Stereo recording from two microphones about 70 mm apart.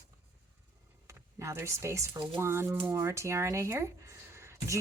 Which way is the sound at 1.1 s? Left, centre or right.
Right.